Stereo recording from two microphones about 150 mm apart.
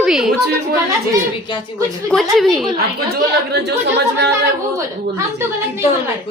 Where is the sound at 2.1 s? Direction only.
Centre (ahead or behind).